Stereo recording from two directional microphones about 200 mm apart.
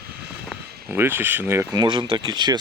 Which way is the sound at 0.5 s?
10° right (ahead or behind).